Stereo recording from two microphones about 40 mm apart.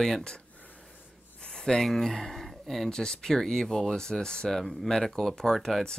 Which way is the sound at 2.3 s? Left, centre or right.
Centre.